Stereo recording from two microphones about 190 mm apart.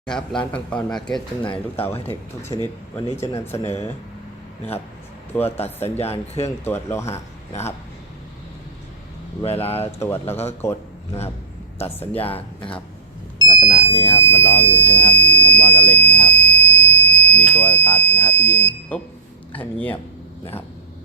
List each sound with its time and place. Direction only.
0.0 s speech: 5° left (ahead or behind)
3.2 s speech: 15° left (ahead or behind)
5.5 s speech: 35° left (ahead or behind)
6.8 s speech: 15° left (ahead or behind)
9.4 s speech: 30° left (ahead or behind)
10.0 s a man's voice: 10° left (ahead or behind)
13.4 s speech: 20° left (ahead or behind)
14.8 s buzzer: 10° left (ahead or behind)
17.5 s speech: 10° left (ahead or behind)